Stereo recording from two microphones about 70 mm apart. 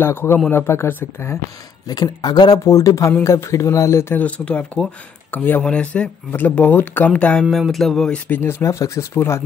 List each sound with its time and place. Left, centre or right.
0.0 s speech: left
1.9 s speech: left
2.6 s speech: left
4.5 s speech: centre
5.6 s speech: centre
7.6 s a sound: centre
8.3 s speech: left
8.6 s speech: left